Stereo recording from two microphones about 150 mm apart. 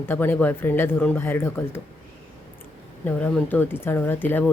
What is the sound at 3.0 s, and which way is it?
A woman's voice, 10° left (ahead or behind).